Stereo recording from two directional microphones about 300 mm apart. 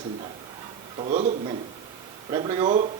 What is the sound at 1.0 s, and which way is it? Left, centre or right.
A man's voice, right.